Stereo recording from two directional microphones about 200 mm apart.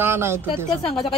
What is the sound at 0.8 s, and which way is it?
Speech, 25° left (ahead or behind).